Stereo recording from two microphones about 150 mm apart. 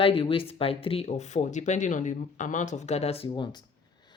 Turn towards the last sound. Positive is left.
turn(degrees=30)  # may be behind; listen again after turning